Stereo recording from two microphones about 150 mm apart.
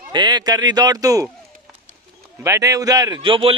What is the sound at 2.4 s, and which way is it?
Speech, 20° right (ahead or behind).